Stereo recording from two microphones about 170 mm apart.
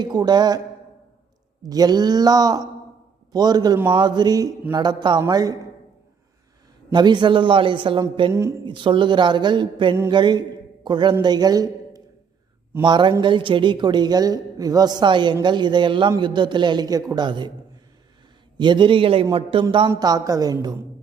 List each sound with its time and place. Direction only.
0.0 s a woman's voice: 25° right (ahead or behind)
1.7 s a woman's voice: 25° right (ahead or behind)
6.9 s a woman's voice: 25° right (ahead or behind)
8.3 s speech: 15° right (ahead or behind)
8.6 s a woman's voice: 30° right (ahead or behind)
18.5 s a man's voice: 25° right (ahead or behind)
19.9 s a woman's voice: 20° right (ahead or behind)